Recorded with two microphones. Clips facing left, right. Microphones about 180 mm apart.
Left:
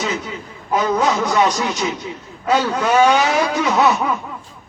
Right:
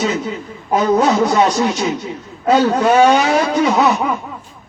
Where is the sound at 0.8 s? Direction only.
45° right (ahead or behind).